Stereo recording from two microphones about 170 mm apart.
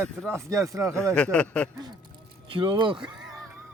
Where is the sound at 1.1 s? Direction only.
5° left (ahead or behind).